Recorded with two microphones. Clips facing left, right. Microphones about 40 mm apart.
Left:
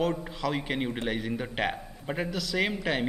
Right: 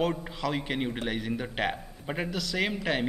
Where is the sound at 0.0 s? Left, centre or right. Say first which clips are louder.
Even; centre.